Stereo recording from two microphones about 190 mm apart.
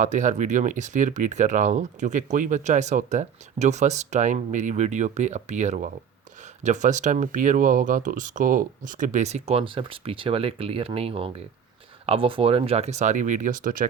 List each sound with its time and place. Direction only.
0.0 s speech: 40° right (ahead or behind)